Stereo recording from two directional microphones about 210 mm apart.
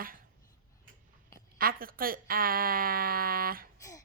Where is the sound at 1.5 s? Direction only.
45° right (ahead or behind).